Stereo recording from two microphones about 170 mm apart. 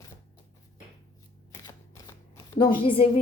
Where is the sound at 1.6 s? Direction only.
15° left (ahead or behind).